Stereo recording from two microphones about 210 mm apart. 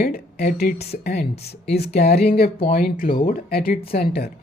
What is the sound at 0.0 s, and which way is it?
A woman's voice, 45° left (ahead or behind).